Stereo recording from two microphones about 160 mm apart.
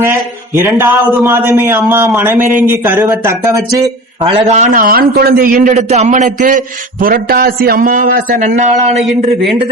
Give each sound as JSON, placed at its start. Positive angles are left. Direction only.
{"t": 0.0, "sound": "speech", "side_deg": -15}
{"t": 4.4, "sound": "a man's voice", "side_deg": -45}
{"t": 7.0, "sound": "a man's voice", "side_deg": -65}
{"t": 9.0, "sound": "speech", "side_deg": 0}